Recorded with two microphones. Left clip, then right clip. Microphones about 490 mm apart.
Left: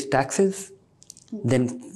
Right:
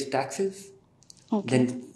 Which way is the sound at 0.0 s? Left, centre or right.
Left.